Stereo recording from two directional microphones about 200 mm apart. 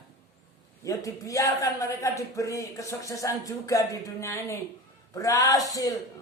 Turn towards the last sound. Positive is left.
turn(degrees=15)  # may be behind; listen again after turning